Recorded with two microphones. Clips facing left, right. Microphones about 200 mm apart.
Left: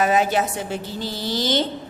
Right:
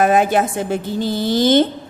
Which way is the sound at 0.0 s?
50° right (ahead or behind).